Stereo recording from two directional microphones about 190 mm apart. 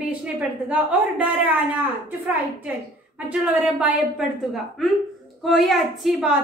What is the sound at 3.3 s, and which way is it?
A woman's voice, 5° right (ahead or behind).